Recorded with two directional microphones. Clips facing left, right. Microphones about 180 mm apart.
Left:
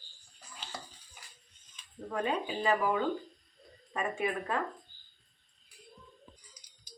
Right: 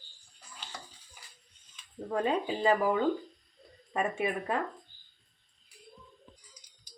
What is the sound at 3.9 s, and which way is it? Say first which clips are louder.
Speech: right 2 dB; 20° right (ahead or behind).